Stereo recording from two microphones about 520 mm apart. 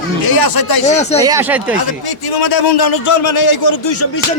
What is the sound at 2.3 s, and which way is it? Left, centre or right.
A man's voice, left.